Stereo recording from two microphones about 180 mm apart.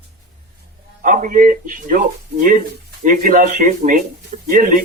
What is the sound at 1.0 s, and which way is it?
A man's voice, 45° right (ahead or behind).